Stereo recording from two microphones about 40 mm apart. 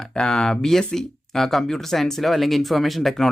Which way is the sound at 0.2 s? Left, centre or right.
Centre.